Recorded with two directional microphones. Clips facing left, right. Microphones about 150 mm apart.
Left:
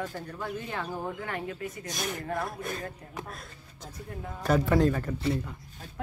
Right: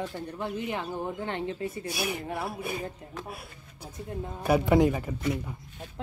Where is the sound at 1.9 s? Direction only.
10° right (ahead or behind).